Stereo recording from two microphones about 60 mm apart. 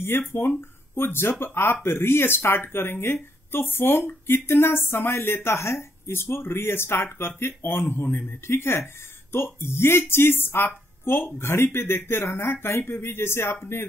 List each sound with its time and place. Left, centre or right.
0.0 s speech: left